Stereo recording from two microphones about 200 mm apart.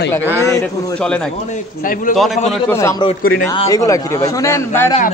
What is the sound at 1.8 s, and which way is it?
Speech, 45° left (ahead or behind).